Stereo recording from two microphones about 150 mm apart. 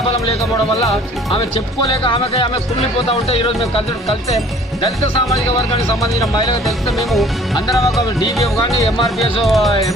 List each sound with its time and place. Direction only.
1.9 s speech: 40° left (ahead or behind)
6.0 s speech: 20° left (ahead or behind)
7.5 s speech: 20° left (ahead or behind)
9.4 s speech: centre (ahead or behind)